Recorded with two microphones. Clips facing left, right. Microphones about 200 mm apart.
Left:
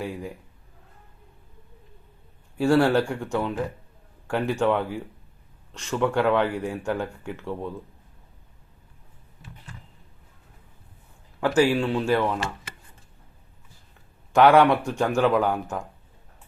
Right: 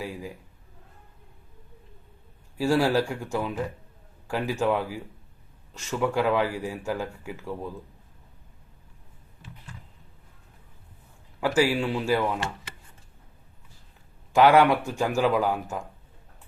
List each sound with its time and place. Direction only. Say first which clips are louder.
0.0 s speech: left 3 dB; centre (ahead or behind)
2.6 s speech: left 3 dB; 5° right (ahead or behind)
11.3 s a man's voice: left 3 dB; 5° right (ahead or behind)
14.3 s speech: left 2 dB; 5° right (ahead or behind)